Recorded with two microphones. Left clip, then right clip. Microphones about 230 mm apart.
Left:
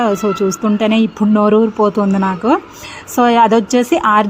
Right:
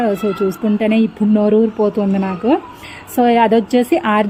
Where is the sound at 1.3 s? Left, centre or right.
Left.